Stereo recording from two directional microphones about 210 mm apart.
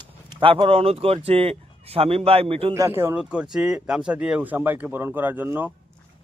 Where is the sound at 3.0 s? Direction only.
10° right (ahead or behind).